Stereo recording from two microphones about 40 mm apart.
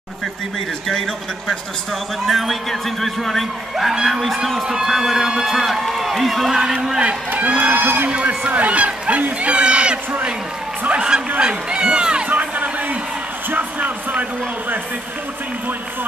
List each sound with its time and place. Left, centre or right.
2.2 s speech: centre
4.6 s speech: centre
7.2 s a man's voice: right
9.4 s crowd: right
10.9 s speech: right
12.3 s music: right
13.6 s a sound: right